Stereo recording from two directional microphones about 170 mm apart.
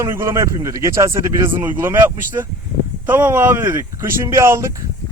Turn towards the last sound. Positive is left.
turn(degrees=-15)  # may be behind; listen again after turning